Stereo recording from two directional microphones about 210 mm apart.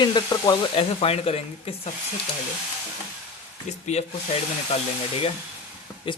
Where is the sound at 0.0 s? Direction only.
20° left (ahead or behind).